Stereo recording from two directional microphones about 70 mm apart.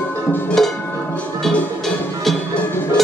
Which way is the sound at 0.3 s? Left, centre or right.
Left.